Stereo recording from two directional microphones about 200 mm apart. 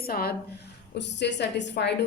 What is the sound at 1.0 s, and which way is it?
Speech, 60° left (ahead or behind).